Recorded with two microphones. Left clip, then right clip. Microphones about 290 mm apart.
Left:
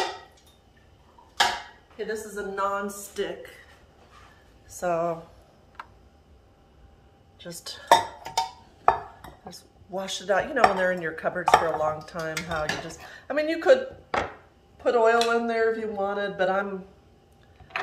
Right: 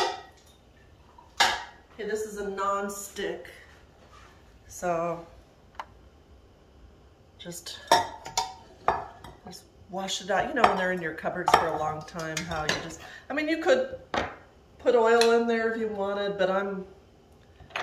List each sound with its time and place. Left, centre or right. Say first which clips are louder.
2.0 s speech: even; centre
4.6 s a woman's voice: left 2 dB; left
7.3 s dishes: left 1 dB; centre
9.4 s speech: left 2 dB; centre